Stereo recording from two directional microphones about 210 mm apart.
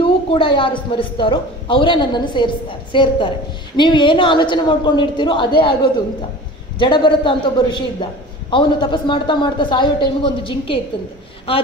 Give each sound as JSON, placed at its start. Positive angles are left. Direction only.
{"t": 0.0, "sound": "a man's voice", "side_deg": 25}